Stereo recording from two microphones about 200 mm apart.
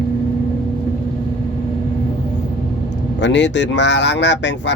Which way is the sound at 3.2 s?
60° left (ahead or behind).